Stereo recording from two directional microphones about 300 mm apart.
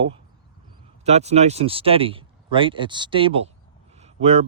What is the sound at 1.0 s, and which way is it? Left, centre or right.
Speech, right.